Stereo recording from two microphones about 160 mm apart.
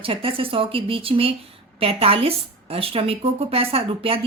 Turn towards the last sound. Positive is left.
turn(degrees=-35)  # may be behind; listen again after turning